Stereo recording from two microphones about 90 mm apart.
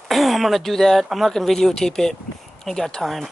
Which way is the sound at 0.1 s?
Centre (ahead or behind).